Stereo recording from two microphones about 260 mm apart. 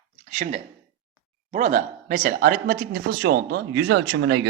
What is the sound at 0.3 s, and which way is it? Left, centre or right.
Speech, right.